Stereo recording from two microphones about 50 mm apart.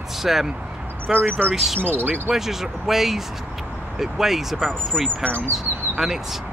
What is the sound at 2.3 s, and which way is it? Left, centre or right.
Speech, centre.